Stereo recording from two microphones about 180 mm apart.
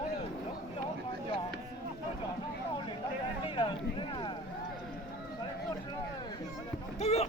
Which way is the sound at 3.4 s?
30° left (ahead or behind).